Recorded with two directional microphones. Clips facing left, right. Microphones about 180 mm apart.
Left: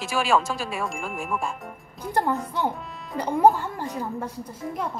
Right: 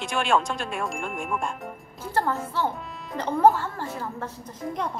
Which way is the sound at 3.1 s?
10° left (ahead or behind).